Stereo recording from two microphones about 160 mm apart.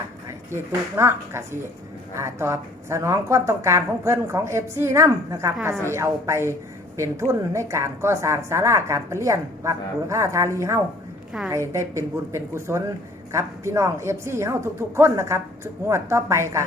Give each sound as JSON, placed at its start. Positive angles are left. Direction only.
{"t": 0.5, "sound": "a woman's voice", "side_deg": -15}